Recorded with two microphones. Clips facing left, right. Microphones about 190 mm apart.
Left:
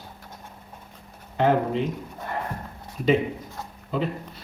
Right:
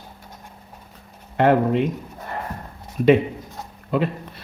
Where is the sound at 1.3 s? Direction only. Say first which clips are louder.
Right 4 dB; 65° right (ahead or behind).